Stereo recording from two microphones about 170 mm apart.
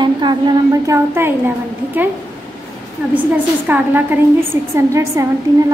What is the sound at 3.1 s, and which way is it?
A woman's voice, 10° right (ahead or behind).